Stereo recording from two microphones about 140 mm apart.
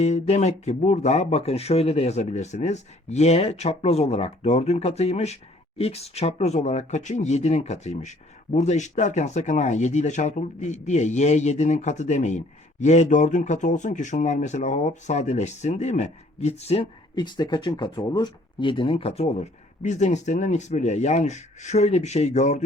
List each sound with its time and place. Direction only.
0.0 s speech: 55° left (ahead or behind)
17.2 s speech: 30° left (ahead or behind); by 22.6 s 55° left (ahead or behind)